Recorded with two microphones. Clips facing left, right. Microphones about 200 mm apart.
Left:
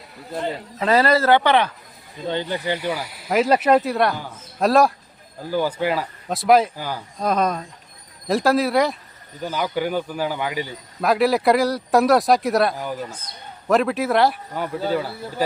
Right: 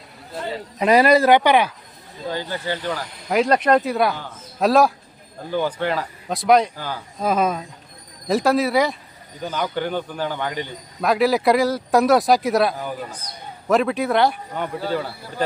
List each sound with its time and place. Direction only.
0.8 s speech: 15° right (ahead or behind)
2.2 s a man's voice: 20° left (ahead or behind)
7.2 s speech: 5° right (ahead or behind)